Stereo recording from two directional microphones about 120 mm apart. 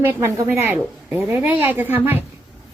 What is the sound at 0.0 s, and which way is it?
A woman's voice, 20° right (ahead or behind).